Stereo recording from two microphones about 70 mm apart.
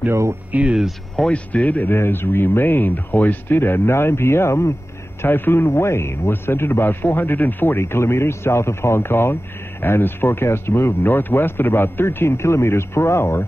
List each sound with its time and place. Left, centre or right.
0.1 s speech: right
0.5 s speech: centre
1.1 s speech: centre
2.0 s a man's voice: left